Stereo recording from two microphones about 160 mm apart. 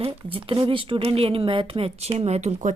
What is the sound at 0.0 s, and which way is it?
A woman's voice, 35° right (ahead or behind).